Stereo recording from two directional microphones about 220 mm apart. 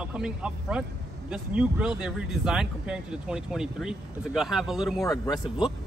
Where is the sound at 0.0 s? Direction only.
5° right (ahead or behind).